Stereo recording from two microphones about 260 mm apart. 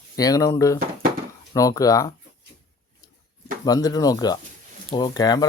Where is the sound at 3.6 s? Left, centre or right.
Centre.